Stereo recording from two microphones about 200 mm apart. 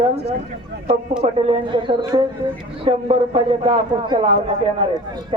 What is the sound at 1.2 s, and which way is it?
A man's voice, 25° right (ahead or behind).